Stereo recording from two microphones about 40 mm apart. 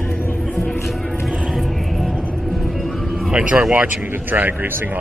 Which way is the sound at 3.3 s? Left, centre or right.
Right.